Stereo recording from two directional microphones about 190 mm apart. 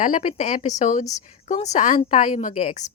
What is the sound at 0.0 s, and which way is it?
Speech, 40° left (ahead or behind).